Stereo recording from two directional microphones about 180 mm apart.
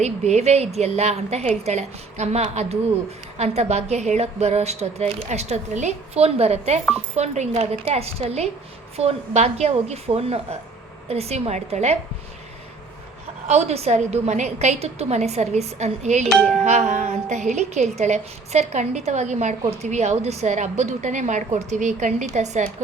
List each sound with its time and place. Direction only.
0.0 s a woman's voice: 40° right (ahead or behind)
13.5 s a woman's voice: 35° right (ahead or behind)
16.3 s music: centre (ahead or behind)
16.6 s a woman's voice: 40° right (ahead or behind)